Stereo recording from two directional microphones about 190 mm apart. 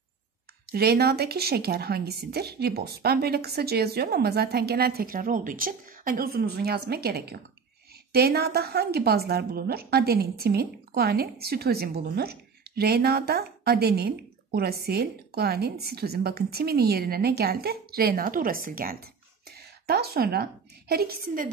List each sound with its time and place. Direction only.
0.7 s a woman's voice: 55° right (ahead or behind)